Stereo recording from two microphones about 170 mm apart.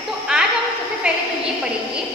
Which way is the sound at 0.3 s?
5° right (ahead or behind).